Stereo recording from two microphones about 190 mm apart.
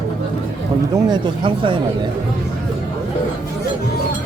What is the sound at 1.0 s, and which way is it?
Speech, 25° right (ahead or behind).